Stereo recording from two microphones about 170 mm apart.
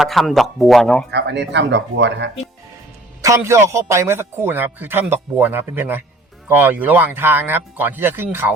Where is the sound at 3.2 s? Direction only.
15° right (ahead or behind).